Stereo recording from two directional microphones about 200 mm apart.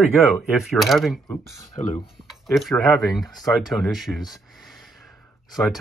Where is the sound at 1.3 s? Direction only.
15° left (ahead or behind).